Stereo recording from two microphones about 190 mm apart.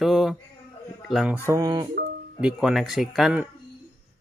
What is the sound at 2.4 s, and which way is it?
Speech, 5° right (ahead or behind).